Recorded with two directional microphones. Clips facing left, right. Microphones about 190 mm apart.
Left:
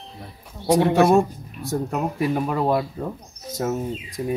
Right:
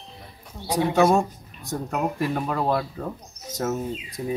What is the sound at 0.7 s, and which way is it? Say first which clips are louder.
Speech: left 4 dB; 65° left (ahead or behind).